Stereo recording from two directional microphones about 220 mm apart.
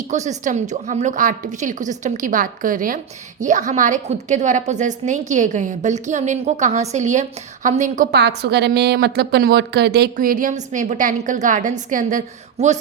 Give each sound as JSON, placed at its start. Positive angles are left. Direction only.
{"t": 0.1, "sound": "a woman's voice", "side_deg": -35}
{"t": 8.1, "sound": "a woman's voice", "side_deg": -50}